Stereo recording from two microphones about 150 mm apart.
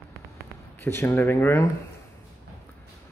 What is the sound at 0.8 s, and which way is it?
Speech, 15° left (ahead or behind).